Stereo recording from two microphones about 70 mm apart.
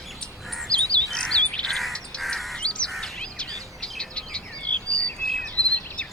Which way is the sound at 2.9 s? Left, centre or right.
Centre.